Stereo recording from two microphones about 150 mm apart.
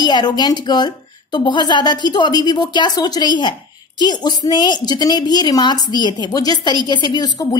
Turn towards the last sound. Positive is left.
turn(degrees=30)  # may be behind; listen again after turning